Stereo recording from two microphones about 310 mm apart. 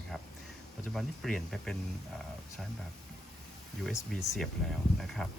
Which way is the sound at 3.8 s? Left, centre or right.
Centre.